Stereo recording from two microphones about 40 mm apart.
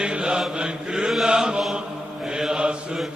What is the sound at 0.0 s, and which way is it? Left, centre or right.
Mantra, right.